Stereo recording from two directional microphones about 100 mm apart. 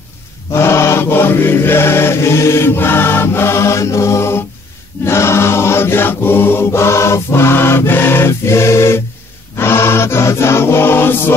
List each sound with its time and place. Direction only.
0.5 s chant: 25° left (ahead or behind)